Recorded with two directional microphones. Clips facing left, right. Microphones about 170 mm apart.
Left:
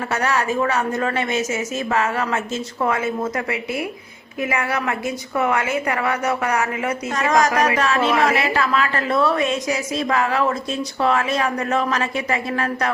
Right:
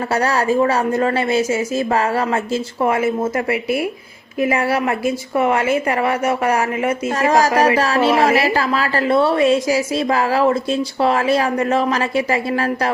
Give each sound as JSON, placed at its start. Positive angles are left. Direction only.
{"t": 0.1, "sound": "a woman's voice", "side_deg": -35}